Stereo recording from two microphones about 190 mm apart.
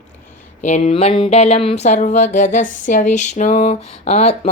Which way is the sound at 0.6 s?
35° left (ahead or behind).